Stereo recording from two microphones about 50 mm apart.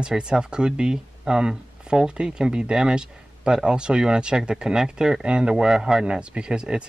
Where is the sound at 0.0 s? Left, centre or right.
Centre.